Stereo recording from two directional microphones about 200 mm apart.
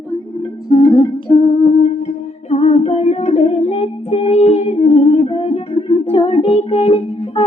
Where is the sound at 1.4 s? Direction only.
25° left (ahead or behind).